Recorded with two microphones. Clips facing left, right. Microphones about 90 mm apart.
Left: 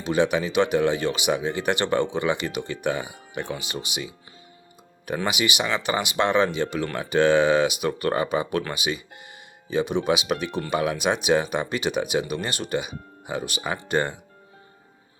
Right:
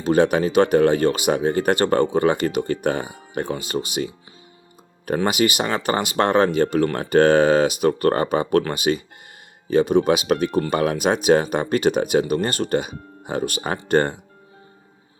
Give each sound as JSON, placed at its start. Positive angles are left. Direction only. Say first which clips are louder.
{"t": 0.0, "sound": "speech", "louder": "right 5 dB", "side_deg": -45}